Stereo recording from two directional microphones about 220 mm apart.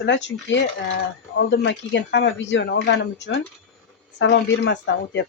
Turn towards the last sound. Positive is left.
turn(degrees=55)  # may be behind; listen again after turning